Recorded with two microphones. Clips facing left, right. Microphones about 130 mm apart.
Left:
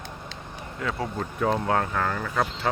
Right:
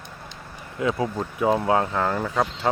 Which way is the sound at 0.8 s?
20° right (ahead or behind).